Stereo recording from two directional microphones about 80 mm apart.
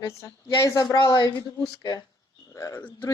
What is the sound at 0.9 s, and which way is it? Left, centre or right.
Speech, left.